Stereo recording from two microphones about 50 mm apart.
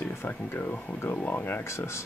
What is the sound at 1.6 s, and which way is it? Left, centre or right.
Speech, left.